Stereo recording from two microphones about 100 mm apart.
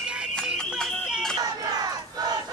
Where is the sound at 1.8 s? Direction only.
40° right (ahead or behind).